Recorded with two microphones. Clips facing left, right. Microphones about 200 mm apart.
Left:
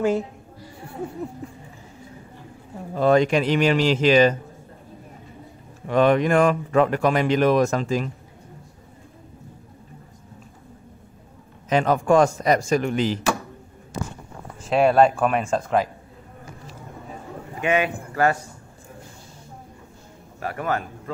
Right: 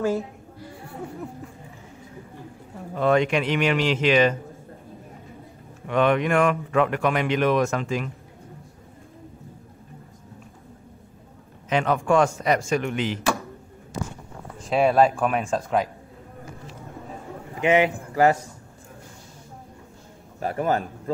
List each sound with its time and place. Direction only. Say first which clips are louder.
2.9 s speech: left 3 dB; 35° left (ahead or behind)
5.9 s speech: left 3 dB; 35° left (ahead or behind)
11.7 s speech: left 3 dB; 40° left (ahead or behind)
14.6 s speech: left 2 dB; centre (ahead or behind)
17.6 s speech: right 3 dB; 20° right (ahead or behind)
20.3 s a man's voice: right 2 dB; 30° right (ahead or behind)